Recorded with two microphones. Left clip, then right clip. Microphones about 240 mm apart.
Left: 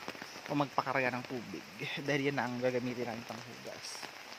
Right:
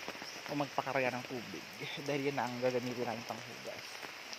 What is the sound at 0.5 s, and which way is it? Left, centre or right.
Speech, left.